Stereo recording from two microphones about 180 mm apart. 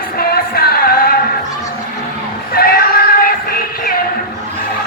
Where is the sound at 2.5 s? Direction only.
55° left (ahead or behind).